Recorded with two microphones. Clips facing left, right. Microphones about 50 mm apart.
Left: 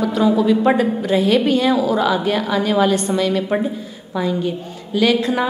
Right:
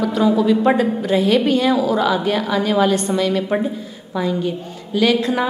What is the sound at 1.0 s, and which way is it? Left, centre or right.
A woman's voice, left.